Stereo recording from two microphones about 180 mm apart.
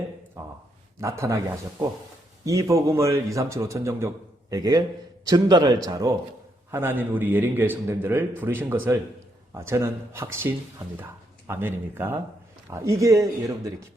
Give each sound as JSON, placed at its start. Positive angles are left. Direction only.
{"t": 1.0, "sound": "a man's voice", "side_deg": -15}
{"t": 2.4, "sound": "a man's voice", "side_deg": -15}